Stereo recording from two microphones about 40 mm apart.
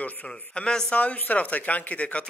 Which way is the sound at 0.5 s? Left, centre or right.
Centre.